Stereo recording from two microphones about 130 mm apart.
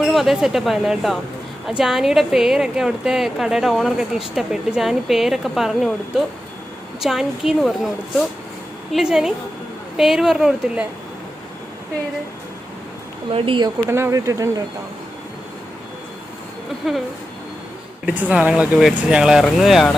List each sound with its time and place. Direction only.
0.0 s a woman's voice: centre (ahead or behind)
8.9 s a woman's voice: 5° right (ahead or behind)
13.3 s speech: 40° right (ahead or behind)
13.9 s speech: 20° right (ahead or behind)
18.3 s a woman's voice: 10° right (ahead or behind)